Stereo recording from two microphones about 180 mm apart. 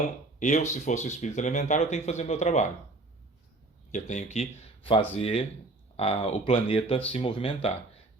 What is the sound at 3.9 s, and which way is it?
Speech, 40° left (ahead or behind).